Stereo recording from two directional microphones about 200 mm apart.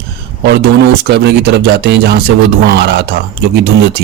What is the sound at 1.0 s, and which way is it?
Speech, 55° right (ahead or behind).